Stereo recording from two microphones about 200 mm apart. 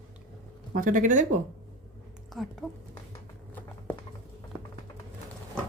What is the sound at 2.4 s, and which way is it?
Speech, centre (ahead or behind).